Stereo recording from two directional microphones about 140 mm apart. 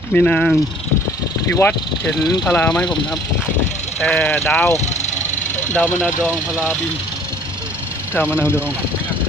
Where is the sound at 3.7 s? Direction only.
55° left (ahead or behind).